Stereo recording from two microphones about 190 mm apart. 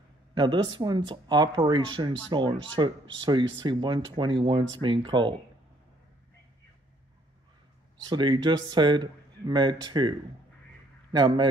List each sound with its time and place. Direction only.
0.3 s speech: 25° right (ahead or behind)
8.1 s a man's voice: 25° right (ahead or behind)